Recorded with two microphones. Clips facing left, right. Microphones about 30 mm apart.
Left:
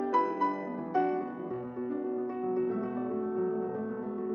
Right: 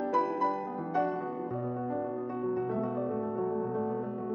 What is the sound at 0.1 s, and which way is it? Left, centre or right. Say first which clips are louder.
Music: even; centre.